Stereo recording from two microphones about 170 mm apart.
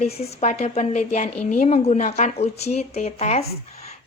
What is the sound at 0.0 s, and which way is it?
A woman's voice, 40° left (ahead or behind).